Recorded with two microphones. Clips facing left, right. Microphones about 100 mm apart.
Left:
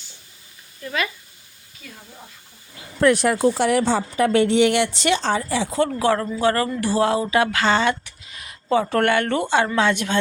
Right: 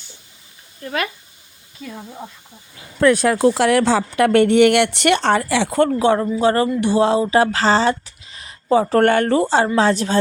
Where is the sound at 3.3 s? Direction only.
90° right; by 5.9 s 55° right (ahead or behind).